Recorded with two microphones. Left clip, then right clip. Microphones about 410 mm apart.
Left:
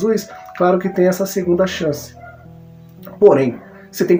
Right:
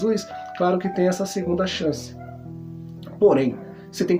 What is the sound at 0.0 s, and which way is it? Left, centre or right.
Speech, right.